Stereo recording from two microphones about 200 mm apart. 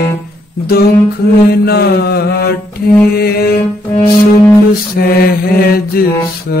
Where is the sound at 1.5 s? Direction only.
50° left (ahead or behind).